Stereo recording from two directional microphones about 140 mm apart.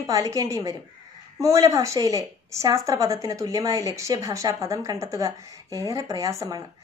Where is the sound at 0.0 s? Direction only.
25° right (ahead or behind).